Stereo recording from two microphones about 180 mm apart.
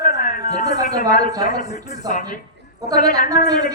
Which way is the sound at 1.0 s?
20° right (ahead or behind).